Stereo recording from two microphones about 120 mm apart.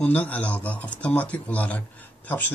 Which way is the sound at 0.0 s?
15° left (ahead or behind).